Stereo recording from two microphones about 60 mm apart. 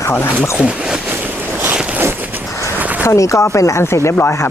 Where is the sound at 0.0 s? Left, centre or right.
Left.